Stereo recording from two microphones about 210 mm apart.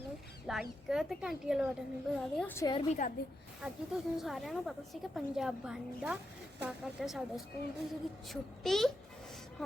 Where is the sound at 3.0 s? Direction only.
40° left (ahead or behind).